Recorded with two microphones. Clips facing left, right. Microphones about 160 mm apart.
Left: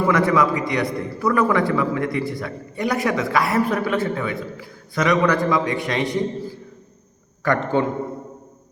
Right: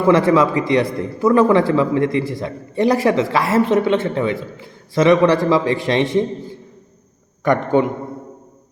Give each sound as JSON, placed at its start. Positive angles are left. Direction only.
{"t": 0.1, "sound": "a man's voice", "side_deg": -30}